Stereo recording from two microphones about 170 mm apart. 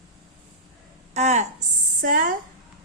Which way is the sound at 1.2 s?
40° right (ahead or behind).